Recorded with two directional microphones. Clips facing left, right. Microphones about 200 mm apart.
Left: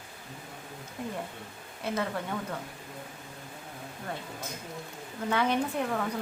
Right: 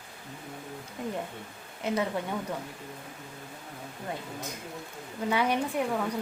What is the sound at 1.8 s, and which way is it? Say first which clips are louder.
Speech: right 3 dB; 20° right (ahead or behind).